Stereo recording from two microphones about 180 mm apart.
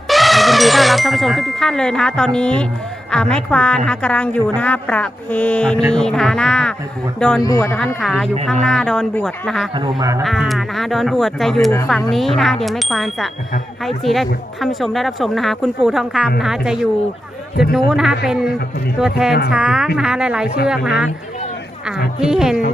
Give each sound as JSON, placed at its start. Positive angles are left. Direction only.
{"t": 0.1, "sound": "a woman's voice", "side_deg": 0}
{"t": 7.4, "sound": "a man's voice", "side_deg": 20}
{"t": 7.9, "sound": "speech", "side_deg": 0}
{"t": 10.0, "sound": "speech", "side_deg": -20}
{"t": 10.2, "sound": "speech", "side_deg": 0}
{"t": 22.2, "sound": "speech", "side_deg": -5}